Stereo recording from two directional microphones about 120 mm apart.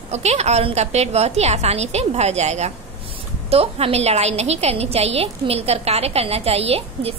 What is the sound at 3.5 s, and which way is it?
A woman's voice, 55° right (ahead or behind).